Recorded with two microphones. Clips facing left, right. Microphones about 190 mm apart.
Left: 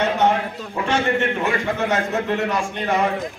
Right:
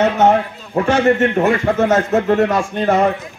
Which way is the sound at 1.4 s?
40° right (ahead or behind).